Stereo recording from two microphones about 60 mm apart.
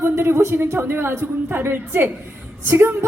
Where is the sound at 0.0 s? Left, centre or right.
Right.